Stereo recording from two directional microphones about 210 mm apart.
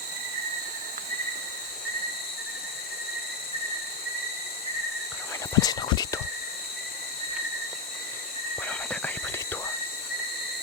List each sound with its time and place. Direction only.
5.5 s speech: 20° left (ahead or behind)
8.5 s whispering: 5° left (ahead or behind)